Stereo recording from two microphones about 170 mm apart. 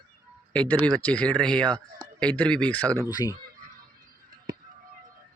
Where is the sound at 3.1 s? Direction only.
25° left (ahead or behind).